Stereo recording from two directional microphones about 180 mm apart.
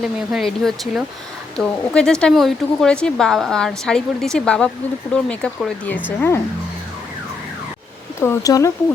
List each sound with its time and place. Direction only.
0.0 s speech: centre (ahead or behind)
8.2 s speech: 15° left (ahead or behind)